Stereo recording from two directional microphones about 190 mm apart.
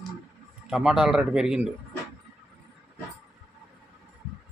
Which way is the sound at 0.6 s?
5° right (ahead or behind).